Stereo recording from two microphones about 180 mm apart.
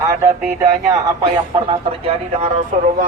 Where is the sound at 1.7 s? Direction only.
30° right (ahead or behind).